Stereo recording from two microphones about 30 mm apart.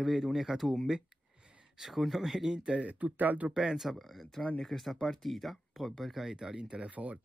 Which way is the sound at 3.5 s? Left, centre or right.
Right.